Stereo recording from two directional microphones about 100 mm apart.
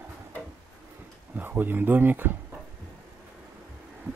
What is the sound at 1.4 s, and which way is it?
Speech, 20° right (ahead or behind).